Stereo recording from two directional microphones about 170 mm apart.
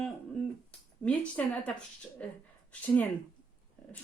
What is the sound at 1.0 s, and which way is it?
Speech, 5° left (ahead or behind).